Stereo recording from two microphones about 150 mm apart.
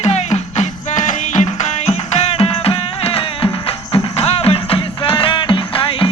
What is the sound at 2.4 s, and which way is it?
Music, 40° left (ahead or behind).